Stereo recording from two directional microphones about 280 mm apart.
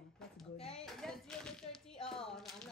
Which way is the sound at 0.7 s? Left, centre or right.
Centre.